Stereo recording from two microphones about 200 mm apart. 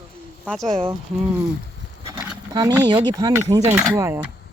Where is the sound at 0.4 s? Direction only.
Centre (ahead or behind).